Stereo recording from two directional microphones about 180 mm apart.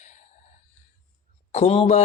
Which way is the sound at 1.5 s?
35° left (ahead or behind).